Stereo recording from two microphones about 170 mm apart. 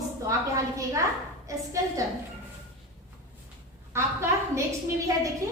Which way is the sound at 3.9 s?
15° right (ahead or behind).